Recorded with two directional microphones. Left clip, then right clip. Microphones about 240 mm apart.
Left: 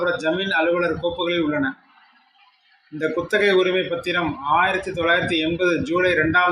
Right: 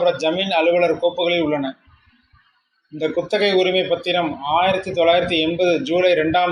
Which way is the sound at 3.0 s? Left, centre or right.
Left.